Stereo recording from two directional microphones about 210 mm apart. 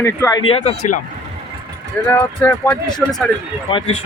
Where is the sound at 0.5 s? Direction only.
30° left (ahead or behind).